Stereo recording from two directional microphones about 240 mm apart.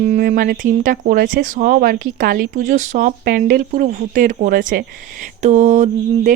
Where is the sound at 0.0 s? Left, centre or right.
Right.